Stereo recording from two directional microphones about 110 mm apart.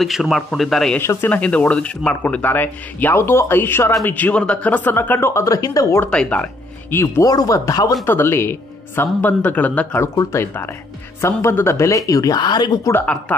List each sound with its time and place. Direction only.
0.0 s speech: centre (ahead or behind)
0.9 s speech: 20° left (ahead or behind)
6.0 s speech: 10° left (ahead or behind)
7.0 s speech: 30° left (ahead or behind)
8.0 s speech: 20° left (ahead or behind); by 12.8 s 40° left (ahead or behind)